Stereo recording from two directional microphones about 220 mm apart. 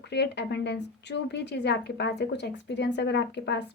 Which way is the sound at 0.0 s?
50° left (ahead or behind).